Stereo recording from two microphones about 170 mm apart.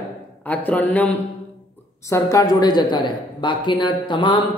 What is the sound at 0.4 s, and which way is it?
Speech, 10° left (ahead or behind).